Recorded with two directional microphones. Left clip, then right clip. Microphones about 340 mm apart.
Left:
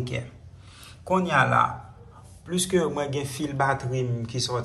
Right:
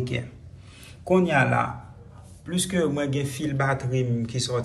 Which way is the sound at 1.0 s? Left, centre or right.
Centre.